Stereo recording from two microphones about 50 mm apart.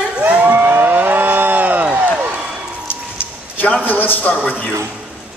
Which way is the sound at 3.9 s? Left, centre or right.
Left.